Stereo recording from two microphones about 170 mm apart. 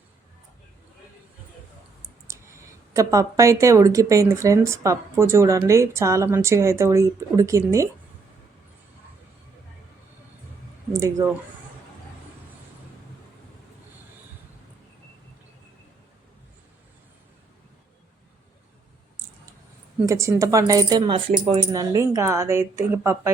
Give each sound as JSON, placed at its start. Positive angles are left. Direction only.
{"t": 2.2, "sound": "speech", "side_deg": -15}
{"t": 10.9, "sound": "speech", "side_deg": -20}
{"t": 20.1, "sound": "speech", "side_deg": -15}
{"t": 21.7, "sound": "speech", "side_deg": -20}